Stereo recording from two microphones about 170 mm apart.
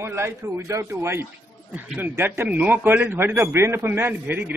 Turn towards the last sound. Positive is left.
turn(degrees=-10)  # may be behind; listen again after turning